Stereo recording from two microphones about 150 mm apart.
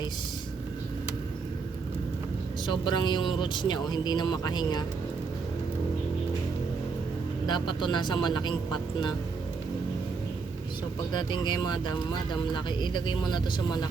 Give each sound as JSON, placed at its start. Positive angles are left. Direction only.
{"t": 2.6, "sound": "speech", "side_deg": 30}
{"t": 7.4, "sound": "speech", "side_deg": 30}
{"t": 11.1, "sound": "speech", "side_deg": 30}